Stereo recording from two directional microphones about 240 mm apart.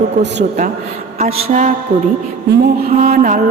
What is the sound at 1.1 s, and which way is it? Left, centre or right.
Speech, right.